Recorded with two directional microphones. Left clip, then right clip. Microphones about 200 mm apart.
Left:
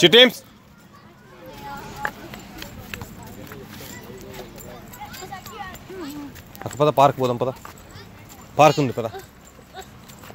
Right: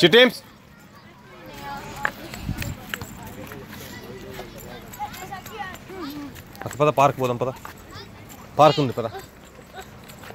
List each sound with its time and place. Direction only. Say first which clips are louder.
0.0 s speech: left 2 dB; 10° left (ahead or behind)
2.0 s run: right 2 dB; 15° left (ahead or behind)
5.3 s a sound: right 1 dB; 45° right (ahead or behind)
6.7 s speech: left 2 dB; 20° left (ahead or behind)
8.5 s speech: left 1 dB; 20° left (ahead or behind)